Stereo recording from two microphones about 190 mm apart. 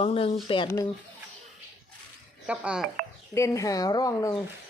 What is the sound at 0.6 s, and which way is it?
Speech, 15° left (ahead or behind).